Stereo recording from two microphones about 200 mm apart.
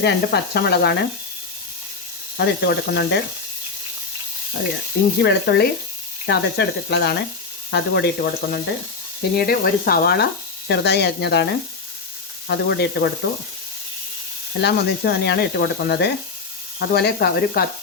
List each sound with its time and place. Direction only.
0.0 s speech: 55° left (ahead or behind)
2.4 s speech: 55° left (ahead or behind)
5.2 s speech: 55° left (ahead or behind)
12.5 s speech: 55° left (ahead or behind)
14.6 s speech: 55° left (ahead or behind)